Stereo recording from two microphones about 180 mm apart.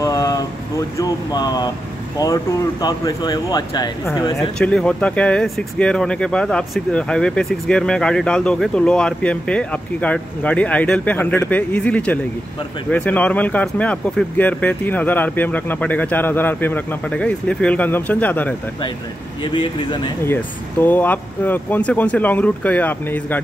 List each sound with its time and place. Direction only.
0.0 s a sound: 20° left (ahead or behind)
2.1 s speech: 20° left (ahead or behind)
4.4 s speech: 5° left (ahead or behind)
19.4 s speech: 25° left (ahead or behind)
20.8 s speech: 10° left (ahead or behind)